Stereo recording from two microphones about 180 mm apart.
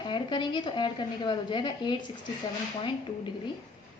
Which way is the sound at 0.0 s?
25° left (ahead or behind).